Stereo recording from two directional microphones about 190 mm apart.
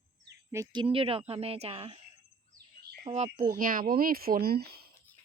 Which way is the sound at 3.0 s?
35° right (ahead or behind).